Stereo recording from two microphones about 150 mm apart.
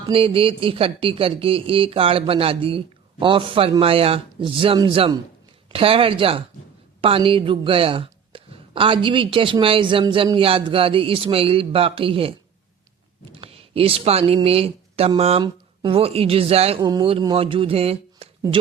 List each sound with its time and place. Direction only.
0.1 s speech: 40° right (ahead or behind)
13.4 s speech: 40° right (ahead or behind)
16.8 s speech: 30° right (ahead or behind)